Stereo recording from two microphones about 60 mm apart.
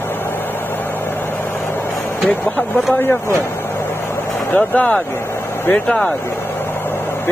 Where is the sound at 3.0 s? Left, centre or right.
Left.